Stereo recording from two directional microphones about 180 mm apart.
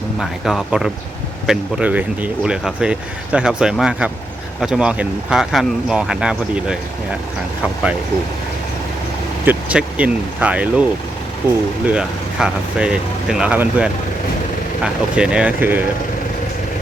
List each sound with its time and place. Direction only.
0.2 s speech: centre (ahead or behind)
9.4 s speech: 10° right (ahead or behind)
11.9 s speech: 5° right (ahead or behind)
15.1 s speech: 5° right (ahead or behind)